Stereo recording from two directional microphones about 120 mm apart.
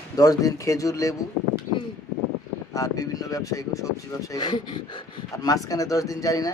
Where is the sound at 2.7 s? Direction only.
30° left (ahead or behind).